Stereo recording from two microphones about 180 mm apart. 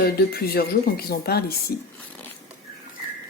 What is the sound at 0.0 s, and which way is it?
A woman's voice, 60° left (ahead or behind).